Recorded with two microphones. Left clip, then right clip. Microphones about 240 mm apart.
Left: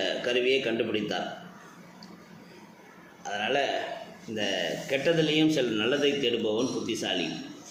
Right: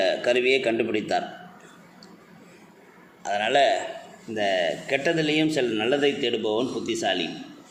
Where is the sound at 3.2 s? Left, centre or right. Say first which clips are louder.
Right 7 dB; right.